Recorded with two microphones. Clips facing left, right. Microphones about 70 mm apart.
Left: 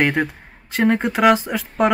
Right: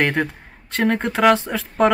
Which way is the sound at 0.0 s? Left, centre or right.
Centre.